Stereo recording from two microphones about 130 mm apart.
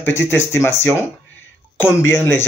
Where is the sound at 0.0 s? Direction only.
20° left (ahead or behind).